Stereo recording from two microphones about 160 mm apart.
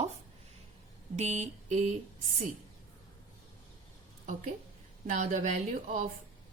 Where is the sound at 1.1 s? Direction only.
45° right (ahead or behind).